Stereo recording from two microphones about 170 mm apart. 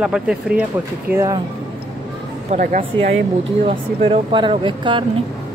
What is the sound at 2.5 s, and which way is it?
Speech, 50° right (ahead or behind).